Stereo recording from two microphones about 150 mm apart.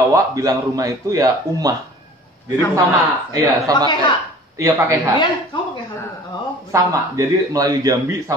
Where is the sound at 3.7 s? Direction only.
25° right (ahead or behind).